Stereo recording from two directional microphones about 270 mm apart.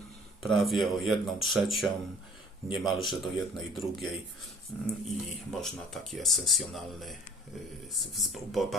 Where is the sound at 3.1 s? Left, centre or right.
Centre.